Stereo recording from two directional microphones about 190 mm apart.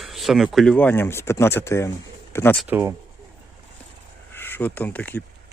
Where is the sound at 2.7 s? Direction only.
10° right (ahead or behind).